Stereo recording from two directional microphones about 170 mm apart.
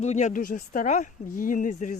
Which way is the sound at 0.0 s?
40° left (ahead or behind).